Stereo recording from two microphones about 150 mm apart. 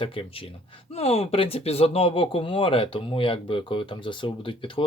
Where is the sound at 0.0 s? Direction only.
35° left (ahead or behind).